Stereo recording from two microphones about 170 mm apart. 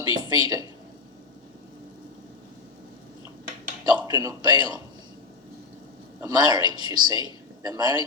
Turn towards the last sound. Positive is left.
turn(degrees=-20)  # may be behind; listen again after turning